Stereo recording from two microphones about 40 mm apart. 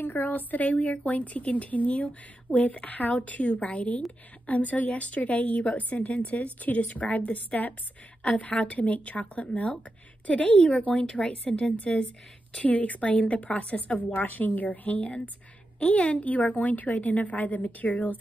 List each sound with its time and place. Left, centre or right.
0.0 s a woman's voice: left
12.6 s a woman's voice: left